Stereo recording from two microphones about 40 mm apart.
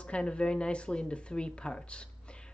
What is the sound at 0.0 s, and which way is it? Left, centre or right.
Speech, left.